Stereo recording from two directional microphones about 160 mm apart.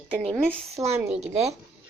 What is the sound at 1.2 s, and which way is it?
Speech, 45° right (ahead or behind).